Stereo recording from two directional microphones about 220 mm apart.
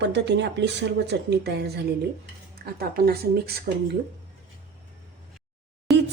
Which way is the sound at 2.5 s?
45° right (ahead or behind).